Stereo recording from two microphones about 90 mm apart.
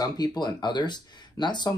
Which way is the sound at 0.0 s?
50° left (ahead or behind).